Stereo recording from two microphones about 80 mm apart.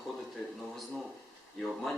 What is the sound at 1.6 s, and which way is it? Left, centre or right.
Speech, centre.